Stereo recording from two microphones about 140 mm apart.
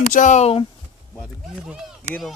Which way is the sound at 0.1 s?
60° left (ahead or behind).